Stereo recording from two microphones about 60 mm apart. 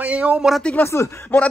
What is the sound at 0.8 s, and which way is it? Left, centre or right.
Speech, left.